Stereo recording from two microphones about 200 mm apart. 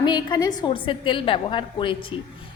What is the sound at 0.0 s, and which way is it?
A woman's voice, 20° left (ahead or behind).